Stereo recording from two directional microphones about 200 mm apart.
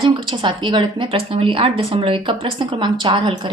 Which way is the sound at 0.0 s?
25° right (ahead or behind).